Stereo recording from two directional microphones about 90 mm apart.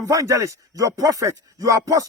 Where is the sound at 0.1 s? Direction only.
35° right (ahead or behind).